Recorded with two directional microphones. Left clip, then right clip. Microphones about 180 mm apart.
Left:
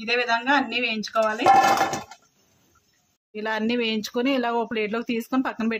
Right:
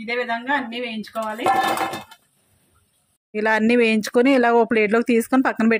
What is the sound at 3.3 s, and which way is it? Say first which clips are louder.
Speech: right 8 dB; 30° right (ahead or behind).